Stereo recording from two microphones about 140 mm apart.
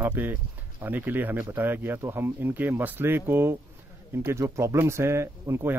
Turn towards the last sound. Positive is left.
turn(degrees=-15)  # may be behind; listen again after turning